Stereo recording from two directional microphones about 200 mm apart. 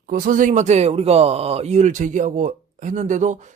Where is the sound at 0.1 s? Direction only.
45° right (ahead or behind).